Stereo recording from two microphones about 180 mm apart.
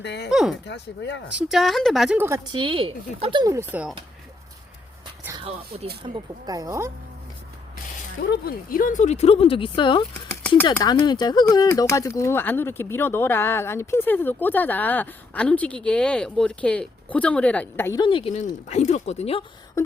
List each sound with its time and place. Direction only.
0.0 s speech: 70° left (ahead or behind)
0.3 s speech: centre (ahead or behind)
0.6 s speech: 80° left
1.5 s speech: centre (ahead or behind)
2.1 s speech: 15° right (ahead or behind)
2.5 s speech: 25° right (ahead or behind)
3.4 s speech: 15° right (ahead or behind)
5.4 s speech: 35° right (ahead or behind); by 6.9 s 15° right (ahead or behind)
8.2 s speech: 60° left (ahead or behind); by 18.0 s 15° left (ahead or behind)
18.0 s speech: 30° left (ahead or behind)